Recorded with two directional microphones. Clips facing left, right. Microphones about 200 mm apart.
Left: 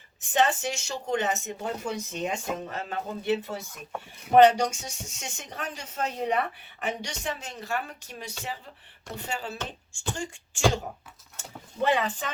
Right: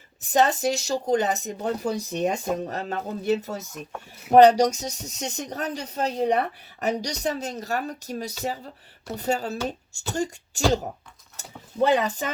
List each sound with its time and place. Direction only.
0.2 s speech: 35° right (ahead or behind)
11.9 s speech: 40° right (ahead or behind)